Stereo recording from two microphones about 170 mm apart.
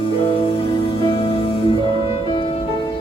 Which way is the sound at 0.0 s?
30° left (ahead or behind).